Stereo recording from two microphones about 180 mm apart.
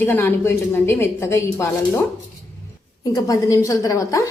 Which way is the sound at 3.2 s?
20° left (ahead or behind).